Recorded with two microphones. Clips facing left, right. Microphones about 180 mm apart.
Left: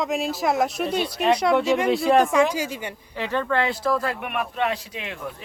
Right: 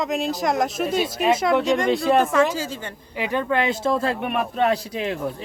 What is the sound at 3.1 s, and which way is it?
A man's voice, 15° right (ahead or behind).